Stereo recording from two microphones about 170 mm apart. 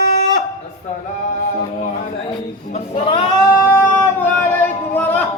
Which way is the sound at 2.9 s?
30° left (ahead or behind).